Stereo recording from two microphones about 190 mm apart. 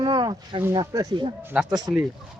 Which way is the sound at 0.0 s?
25° right (ahead or behind).